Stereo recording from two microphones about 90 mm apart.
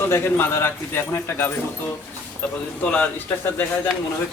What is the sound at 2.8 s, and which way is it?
Speech, 10° left (ahead or behind).